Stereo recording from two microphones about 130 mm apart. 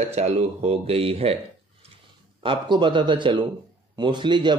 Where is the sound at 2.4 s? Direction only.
40° right (ahead or behind).